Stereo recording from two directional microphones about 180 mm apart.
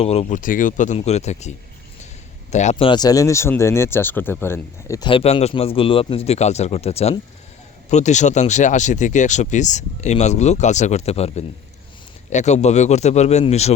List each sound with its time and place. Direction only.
0.0 s speech: 35° left (ahead or behind)